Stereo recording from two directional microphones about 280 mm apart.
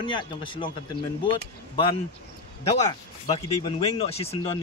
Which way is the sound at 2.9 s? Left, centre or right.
Centre.